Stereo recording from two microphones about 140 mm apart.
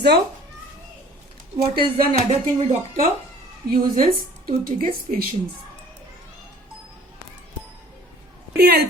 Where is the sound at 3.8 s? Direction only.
90° right.